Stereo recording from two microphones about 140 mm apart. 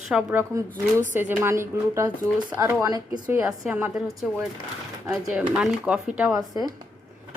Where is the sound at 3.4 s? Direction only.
5° right (ahead or behind).